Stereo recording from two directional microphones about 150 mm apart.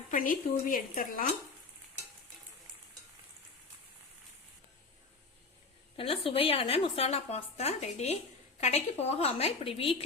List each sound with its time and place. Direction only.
0.1 s speech: 65° left (ahead or behind)
6.0 s a woman's voice: 40° left (ahead or behind)